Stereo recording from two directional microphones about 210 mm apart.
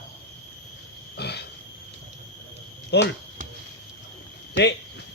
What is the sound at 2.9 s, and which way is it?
Speech, 55° left (ahead or behind).